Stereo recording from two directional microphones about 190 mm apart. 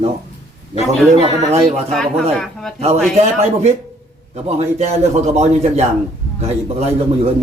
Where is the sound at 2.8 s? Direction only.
35° right (ahead or behind).